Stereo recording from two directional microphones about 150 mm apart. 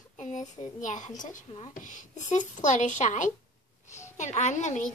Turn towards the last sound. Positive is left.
turn(degrees=55)  # may be behind; listen again after turning